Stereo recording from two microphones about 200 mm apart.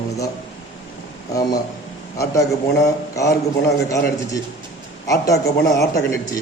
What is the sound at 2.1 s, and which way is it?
A man's voice, 15° left (ahead or behind).